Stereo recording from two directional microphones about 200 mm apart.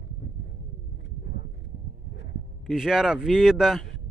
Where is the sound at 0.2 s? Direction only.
55° left (ahead or behind).